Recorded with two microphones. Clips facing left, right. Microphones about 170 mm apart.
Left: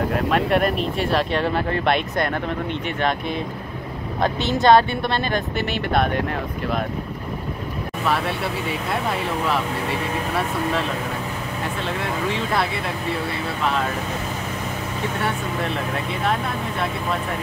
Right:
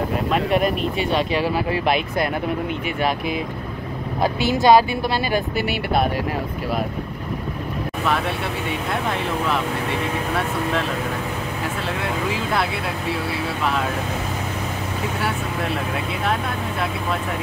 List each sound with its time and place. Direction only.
0.1 s speech: centre (ahead or behind)
8.1 s speech: centre (ahead or behind)
12.0 s speech: centre (ahead or behind)
15.1 s speech: 5° right (ahead or behind)